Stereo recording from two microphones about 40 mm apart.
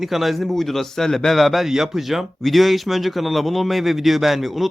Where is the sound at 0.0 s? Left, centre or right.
Centre.